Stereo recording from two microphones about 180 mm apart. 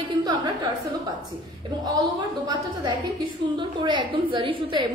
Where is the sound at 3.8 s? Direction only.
25° right (ahead or behind).